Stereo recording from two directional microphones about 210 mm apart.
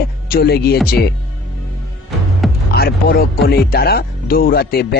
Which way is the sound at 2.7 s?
50° left (ahead or behind).